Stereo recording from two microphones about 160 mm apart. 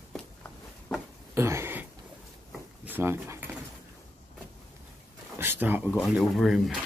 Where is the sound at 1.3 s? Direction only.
15° right (ahead or behind).